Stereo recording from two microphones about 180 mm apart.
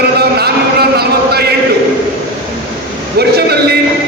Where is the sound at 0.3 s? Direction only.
60° right (ahead or behind).